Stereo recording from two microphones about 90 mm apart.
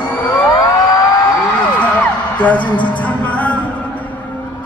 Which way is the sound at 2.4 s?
15° left (ahead or behind).